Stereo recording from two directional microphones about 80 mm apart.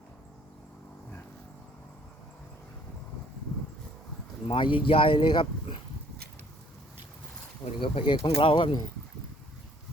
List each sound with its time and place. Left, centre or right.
4.4 s speech: left
7.8 s speech: left